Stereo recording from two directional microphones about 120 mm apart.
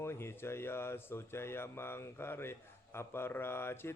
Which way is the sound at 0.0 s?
20° left (ahead or behind).